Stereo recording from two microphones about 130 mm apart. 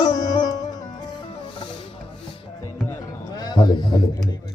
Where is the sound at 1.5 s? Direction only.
35° left (ahead or behind).